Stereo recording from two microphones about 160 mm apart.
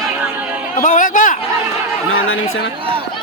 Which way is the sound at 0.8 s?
55° left (ahead or behind).